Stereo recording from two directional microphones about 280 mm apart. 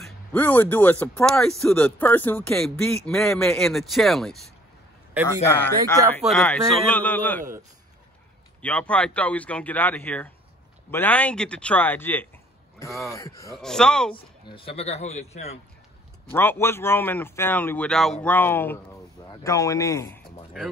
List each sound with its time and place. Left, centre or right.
0.0 s speech: centre
5.5 s speech: centre
8.6 s speech: centre
14.1 s speech: centre
16.3 s speech: centre